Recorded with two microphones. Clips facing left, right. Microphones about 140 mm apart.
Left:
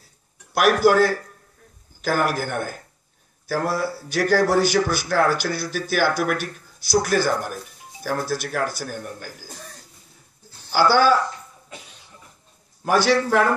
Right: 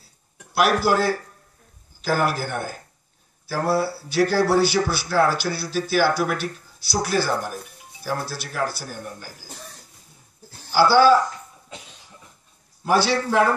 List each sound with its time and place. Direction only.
0.8 s speech: 45° left (ahead or behind)
3.8 s speech: 45° left (ahead or behind)
10.7 s speech: 50° left (ahead or behind)
12.8 s speech: 45° left (ahead or behind)